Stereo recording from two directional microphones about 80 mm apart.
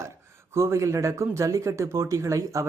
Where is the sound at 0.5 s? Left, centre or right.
Right.